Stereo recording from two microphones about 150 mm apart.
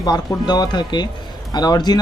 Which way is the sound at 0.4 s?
30° left (ahead or behind).